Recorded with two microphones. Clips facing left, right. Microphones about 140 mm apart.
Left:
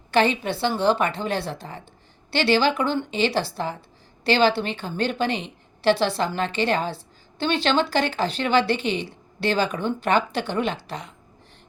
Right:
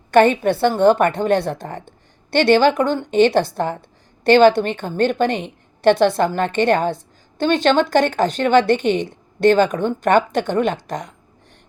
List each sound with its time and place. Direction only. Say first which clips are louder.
0.1 s a woman's voice: right 7 dB; 50° right (ahead or behind)